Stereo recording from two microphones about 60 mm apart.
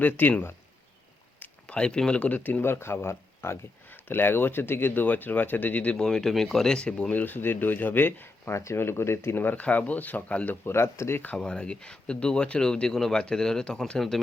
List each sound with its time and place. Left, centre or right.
0.0 s speech: left
1.6 s speech: centre
6.0 s speech: centre
7.1 s speech: left
8.5 s speech: left
10.7 s speech: left
11.3 s speech: centre